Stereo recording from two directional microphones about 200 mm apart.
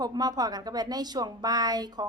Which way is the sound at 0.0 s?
20° right (ahead or behind).